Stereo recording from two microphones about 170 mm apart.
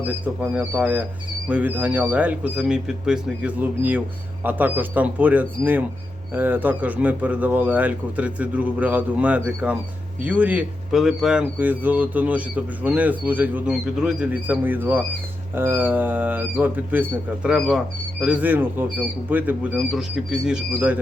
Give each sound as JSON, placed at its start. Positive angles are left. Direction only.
{"t": 0.0, "sound": "speech", "side_deg": -10}